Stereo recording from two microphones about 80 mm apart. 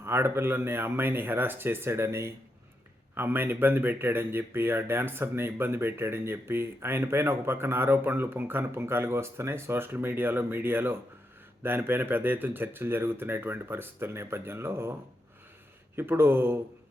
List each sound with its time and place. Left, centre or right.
0.0 s speech: right
16.0 s speech: right